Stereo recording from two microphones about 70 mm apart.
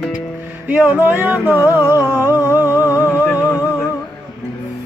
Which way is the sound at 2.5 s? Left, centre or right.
Left.